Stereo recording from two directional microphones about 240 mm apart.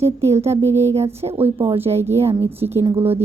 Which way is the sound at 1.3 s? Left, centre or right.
Centre.